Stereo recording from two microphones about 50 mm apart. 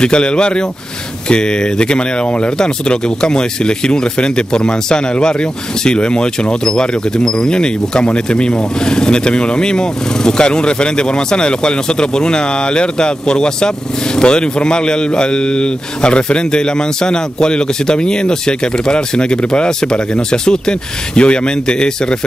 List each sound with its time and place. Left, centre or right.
0.0 s speech: centre